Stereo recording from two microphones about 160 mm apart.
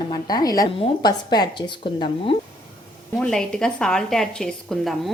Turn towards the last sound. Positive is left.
turn(degrees=0)  # may be behind; listen again after turning